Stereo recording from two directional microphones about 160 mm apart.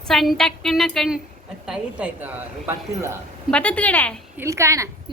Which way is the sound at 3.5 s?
10° left (ahead or behind).